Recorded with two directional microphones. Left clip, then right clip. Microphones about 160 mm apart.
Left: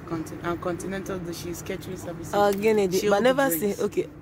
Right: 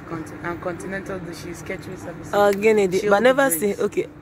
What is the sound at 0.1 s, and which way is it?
Speech, 55° left (ahead or behind).